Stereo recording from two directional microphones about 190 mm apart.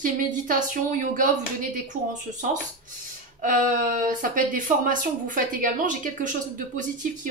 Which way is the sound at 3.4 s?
45° right (ahead or behind).